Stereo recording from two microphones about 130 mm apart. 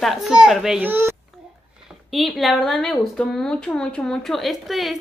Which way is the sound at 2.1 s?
Centre (ahead or behind).